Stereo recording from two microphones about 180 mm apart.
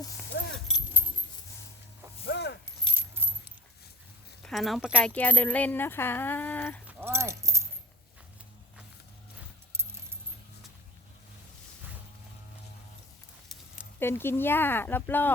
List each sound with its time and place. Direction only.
0.3 s a sound: 65° left (ahead or behind)
0.7 s a sound: centre (ahead or behind)
2.2 s keys jangling: 70° left (ahead or behind)
3.2 s coin: 10° right (ahead or behind)
4.4 s speech: centre (ahead or behind)
6.8 s keys jangling: 15° right (ahead or behind)
14.0 s speech: 10° left (ahead or behind)